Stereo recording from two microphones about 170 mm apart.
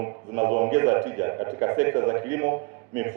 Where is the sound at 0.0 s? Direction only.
15° right (ahead or behind).